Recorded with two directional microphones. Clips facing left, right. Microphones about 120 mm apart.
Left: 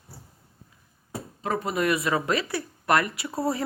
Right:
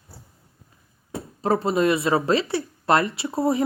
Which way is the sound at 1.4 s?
30° right (ahead or behind).